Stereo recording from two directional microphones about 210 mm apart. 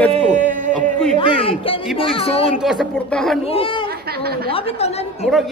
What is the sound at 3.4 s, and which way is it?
Speech, 25° left (ahead or behind).